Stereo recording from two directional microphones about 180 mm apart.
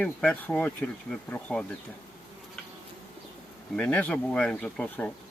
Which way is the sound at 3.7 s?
5° left (ahead or behind).